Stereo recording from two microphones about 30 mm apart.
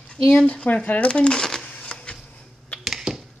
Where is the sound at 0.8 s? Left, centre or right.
Left.